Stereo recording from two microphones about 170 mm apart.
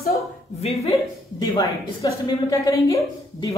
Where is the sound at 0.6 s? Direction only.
40° left (ahead or behind).